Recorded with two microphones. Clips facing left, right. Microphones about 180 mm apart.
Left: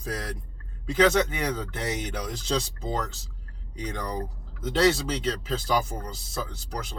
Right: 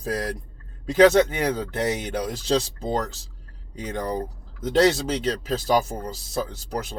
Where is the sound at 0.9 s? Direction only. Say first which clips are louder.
Right 6 dB; 40° right (ahead or behind).